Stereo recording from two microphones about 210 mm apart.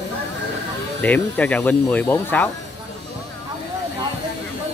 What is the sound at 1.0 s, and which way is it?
Speech, 5° left (ahead or behind).